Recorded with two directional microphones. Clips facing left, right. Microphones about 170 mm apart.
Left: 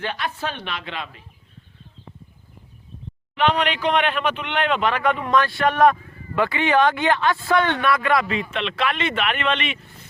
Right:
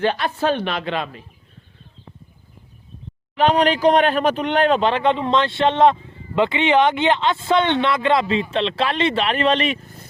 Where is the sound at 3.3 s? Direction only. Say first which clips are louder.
Right 4 dB; 35° right (ahead or behind).